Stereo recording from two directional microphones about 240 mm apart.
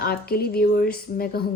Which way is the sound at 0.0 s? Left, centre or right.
Left.